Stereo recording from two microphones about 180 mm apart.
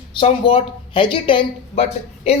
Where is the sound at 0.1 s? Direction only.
30° left (ahead or behind).